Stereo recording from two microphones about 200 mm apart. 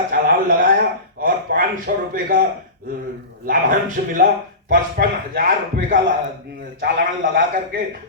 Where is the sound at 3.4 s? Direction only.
45° right (ahead or behind).